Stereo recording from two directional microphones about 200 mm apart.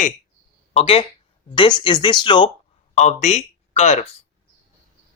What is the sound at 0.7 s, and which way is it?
Speech, 30° left (ahead or behind).